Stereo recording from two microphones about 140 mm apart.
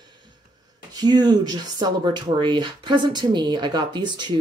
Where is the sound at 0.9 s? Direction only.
30° right (ahead or behind).